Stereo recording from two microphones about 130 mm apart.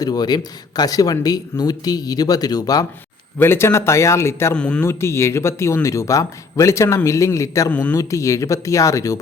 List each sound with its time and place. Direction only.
0.0 s speech: 30° left (ahead or behind)
3.3 s speech: 20° left (ahead or behind)
4.5 s a man's voice: 10° left (ahead or behind)
4.9 s speech: 20° left (ahead or behind)
7.7 s a man's voice: 10° left (ahead or behind)
7.9 s speech: 25° left (ahead or behind)